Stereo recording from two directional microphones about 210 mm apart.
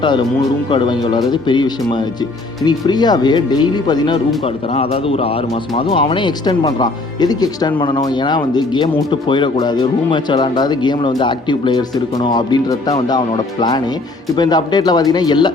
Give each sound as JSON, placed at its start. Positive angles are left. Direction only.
{"t": 0.0, "sound": "speech", "side_deg": 20}